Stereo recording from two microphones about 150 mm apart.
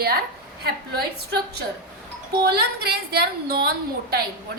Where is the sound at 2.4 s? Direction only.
90° right.